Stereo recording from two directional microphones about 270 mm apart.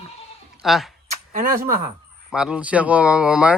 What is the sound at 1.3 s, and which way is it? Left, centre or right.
Speech, right.